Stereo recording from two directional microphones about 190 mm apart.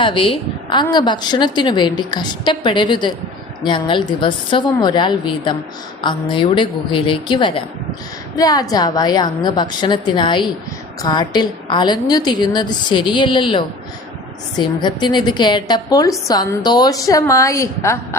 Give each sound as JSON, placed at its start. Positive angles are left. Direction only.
{"t": 0.0, "sound": "a woman's voice", "side_deg": 25}